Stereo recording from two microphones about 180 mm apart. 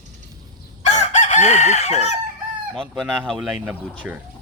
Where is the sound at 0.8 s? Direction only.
40° left (ahead or behind).